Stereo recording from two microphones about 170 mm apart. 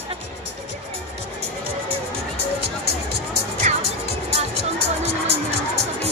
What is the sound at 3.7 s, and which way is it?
Music, 45° right (ahead or behind).